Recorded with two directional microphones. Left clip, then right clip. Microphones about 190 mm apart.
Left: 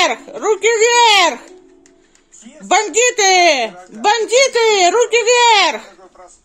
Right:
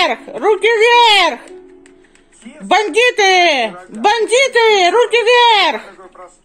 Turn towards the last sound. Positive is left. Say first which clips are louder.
# right 1 dB
turn(degrees=5)  # may be behind; listen again after turning